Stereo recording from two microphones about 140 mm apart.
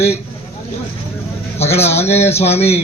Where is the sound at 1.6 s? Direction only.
50° left (ahead or behind).